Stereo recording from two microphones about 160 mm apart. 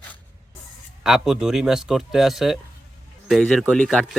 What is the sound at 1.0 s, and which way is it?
Speech, centre (ahead or behind).